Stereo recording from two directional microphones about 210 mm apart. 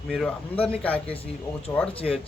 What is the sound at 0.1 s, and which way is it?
Speech, centre (ahead or behind).